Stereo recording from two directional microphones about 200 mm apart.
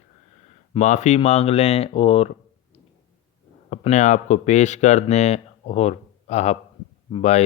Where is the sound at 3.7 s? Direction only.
35° left (ahead or behind).